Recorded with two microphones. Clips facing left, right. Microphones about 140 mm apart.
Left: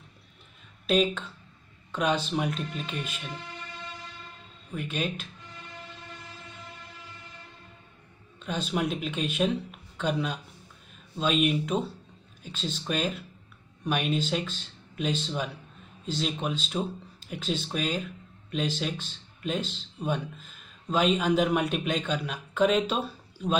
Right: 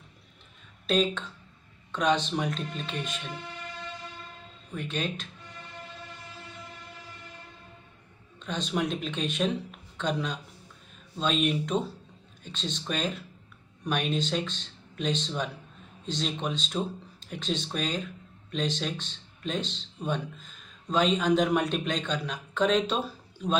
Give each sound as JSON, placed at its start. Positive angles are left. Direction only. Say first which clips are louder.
{"t": 0.8, "sound": "speech", "louder": "left 1 dB", "side_deg": 10}
{"t": 4.7, "sound": "speech", "louder": "left 1 dB", "side_deg": 10}
{"t": 8.4, "sound": "speech", "louder": "even", "side_deg": 5}